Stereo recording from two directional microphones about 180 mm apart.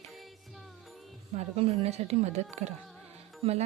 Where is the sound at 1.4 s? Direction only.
35° right (ahead or behind).